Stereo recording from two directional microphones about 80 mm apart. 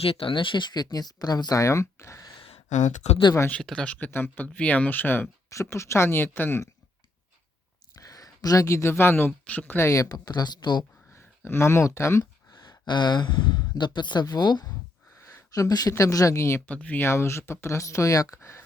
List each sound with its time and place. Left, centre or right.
0.2 s speech: left
1.6 s speech: left
3.6 s speech: centre
3.9 s speech: left
5.5 s speech: left
8.0 s speech: left; by 9.7 s centre
9.7 s speech: left
11.1 s speech: left
12.2 s speech: left
15.5 s speech: left
16.6 s speech: centre; by 18.6 s left